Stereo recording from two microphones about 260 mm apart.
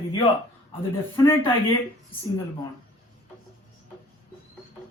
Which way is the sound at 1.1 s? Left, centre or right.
Centre.